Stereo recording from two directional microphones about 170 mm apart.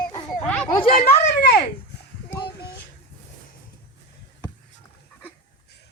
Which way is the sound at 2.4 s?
70° left (ahead or behind).